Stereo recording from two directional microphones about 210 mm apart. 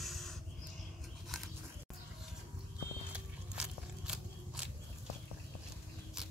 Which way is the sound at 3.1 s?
5° right (ahead or behind).